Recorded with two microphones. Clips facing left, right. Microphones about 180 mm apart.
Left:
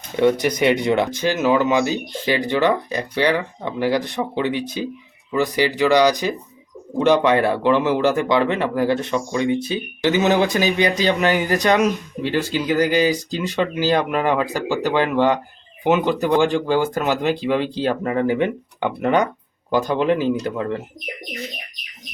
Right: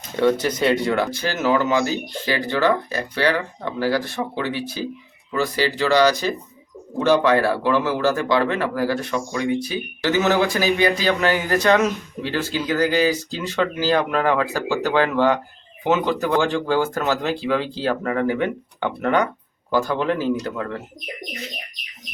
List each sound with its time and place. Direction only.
0.2 s speech: 15° left (ahead or behind)